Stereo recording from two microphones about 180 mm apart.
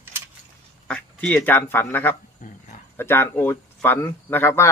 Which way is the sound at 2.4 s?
50° left (ahead or behind).